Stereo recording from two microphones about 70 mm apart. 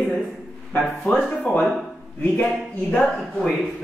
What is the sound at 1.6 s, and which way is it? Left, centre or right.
Speech, centre.